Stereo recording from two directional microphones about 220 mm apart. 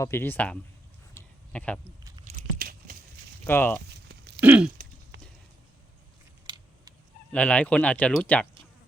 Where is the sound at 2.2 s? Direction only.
40° right (ahead or behind).